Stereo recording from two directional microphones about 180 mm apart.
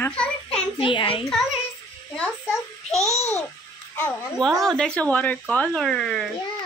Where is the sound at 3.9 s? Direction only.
10° left (ahead or behind).